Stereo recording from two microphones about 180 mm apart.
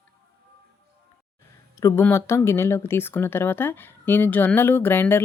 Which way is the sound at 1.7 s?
15° left (ahead or behind).